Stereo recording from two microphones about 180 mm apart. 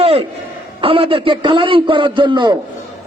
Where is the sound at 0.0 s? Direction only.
30° right (ahead or behind).